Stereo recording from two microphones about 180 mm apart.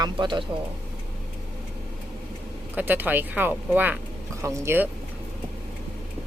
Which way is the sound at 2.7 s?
10° right (ahead or behind).